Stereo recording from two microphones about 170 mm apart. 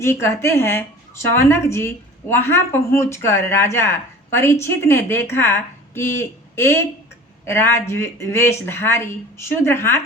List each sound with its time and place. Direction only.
0.0 s speech: 15° left (ahead or behind)